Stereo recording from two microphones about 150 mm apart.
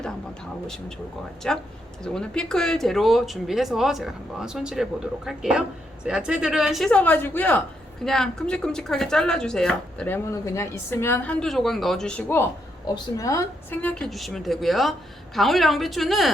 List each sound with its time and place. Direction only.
1.4 s speech: 5° left (ahead or behind)
10.3 s a woman's voice: 20° left (ahead or behind)
12.9 s speech: 20° left (ahead or behind)
13.8 s speech: 5° left (ahead or behind)